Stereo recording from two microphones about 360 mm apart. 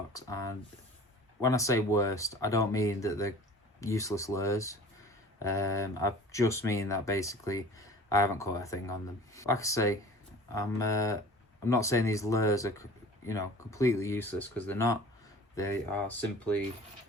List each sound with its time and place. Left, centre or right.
0.1 s speech: centre